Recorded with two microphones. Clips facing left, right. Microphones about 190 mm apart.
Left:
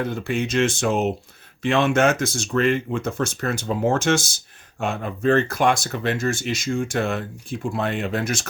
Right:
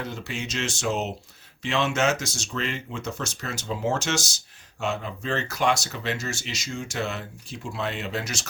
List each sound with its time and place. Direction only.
0.0 s speech: 55° left (ahead or behind)